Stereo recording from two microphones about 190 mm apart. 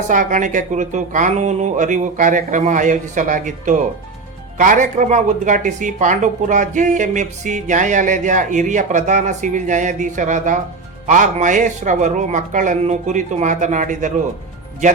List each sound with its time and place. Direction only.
0.1 s speech: 45° right (ahead or behind)